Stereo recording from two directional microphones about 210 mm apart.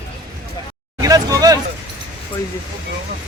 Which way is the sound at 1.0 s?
15° right (ahead or behind).